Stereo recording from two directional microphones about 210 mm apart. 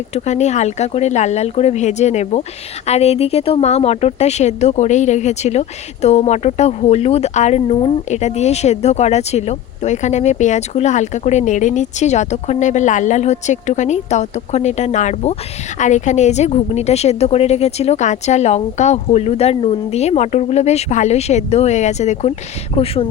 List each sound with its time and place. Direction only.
0.1 s speech: 35° left (ahead or behind)